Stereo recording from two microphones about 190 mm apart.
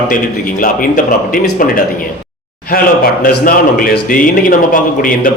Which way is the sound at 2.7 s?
50° left (ahead or behind).